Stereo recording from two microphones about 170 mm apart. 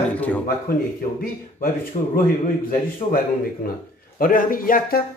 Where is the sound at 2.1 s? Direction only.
55° left (ahead or behind).